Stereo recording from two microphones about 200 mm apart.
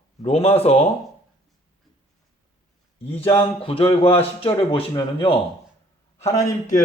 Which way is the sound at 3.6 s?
25° left (ahead or behind).